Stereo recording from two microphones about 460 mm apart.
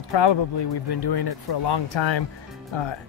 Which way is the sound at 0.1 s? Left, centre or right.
Left.